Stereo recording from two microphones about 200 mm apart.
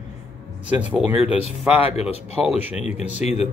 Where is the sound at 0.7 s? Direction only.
5° right (ahead or behind).